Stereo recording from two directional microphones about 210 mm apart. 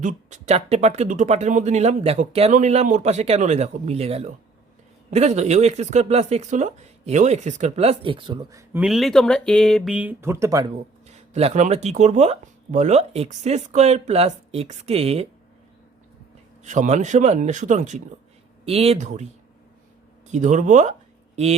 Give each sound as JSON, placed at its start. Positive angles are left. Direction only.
{"t": 0.0, "sound": "speech", "side_deg": -35}
{"t": 8.8, "sound": "speech", "side_deg": 0}
{"t": 11.0, "sound": "speech", "side_deg": -30}
{"t": 16.6, "sound": "speech", "side_deg": -35}